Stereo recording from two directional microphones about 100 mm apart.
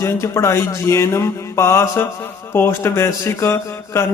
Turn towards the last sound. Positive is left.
turn(degrees=30)  # may be behind; listen again after turning